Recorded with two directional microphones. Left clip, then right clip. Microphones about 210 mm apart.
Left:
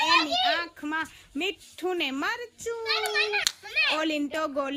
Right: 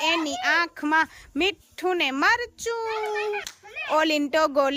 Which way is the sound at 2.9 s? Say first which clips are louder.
Left 1 dB; 10° right (ahead or behind).